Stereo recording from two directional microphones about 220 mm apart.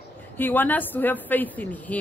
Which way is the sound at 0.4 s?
10° left (ahead or behind).